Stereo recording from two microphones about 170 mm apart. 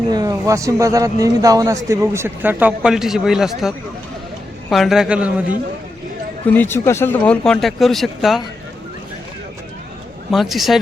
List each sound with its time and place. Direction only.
0.1 s a man's voice: 20° right (ahead or behind)
6.5 s speech: 10° left (ahead or behind)
10.3 s a man's voice: centre (ahead or behind)